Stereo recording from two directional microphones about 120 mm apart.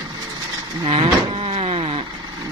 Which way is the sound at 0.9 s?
50° right (ahead or behind).